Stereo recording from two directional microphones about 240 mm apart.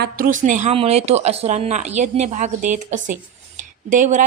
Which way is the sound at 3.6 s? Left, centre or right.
Right.